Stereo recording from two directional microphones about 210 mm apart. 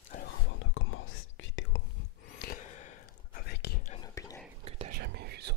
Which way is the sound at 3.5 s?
50° left (ahead or behind).